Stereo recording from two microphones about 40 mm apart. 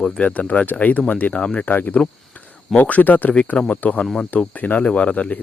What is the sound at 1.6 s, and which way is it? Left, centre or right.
Speech, left.